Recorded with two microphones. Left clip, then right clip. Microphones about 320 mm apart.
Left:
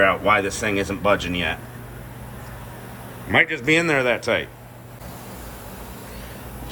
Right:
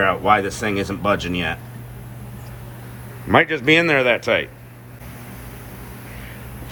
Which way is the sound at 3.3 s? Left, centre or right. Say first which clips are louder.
Right 3 dB; centre.